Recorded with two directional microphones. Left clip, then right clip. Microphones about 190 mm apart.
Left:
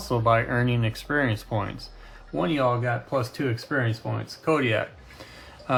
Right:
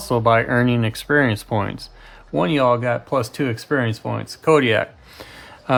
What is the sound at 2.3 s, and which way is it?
Speech, 60° right (ahead or behind).